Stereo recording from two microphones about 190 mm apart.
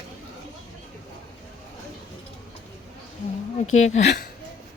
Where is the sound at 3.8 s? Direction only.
35° left (ahead or behind).